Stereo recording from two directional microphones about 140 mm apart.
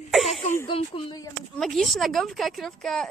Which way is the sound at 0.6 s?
40° left (ahead or behind).